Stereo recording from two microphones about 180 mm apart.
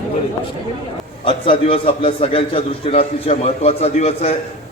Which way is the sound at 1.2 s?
30° left (ahead or behind).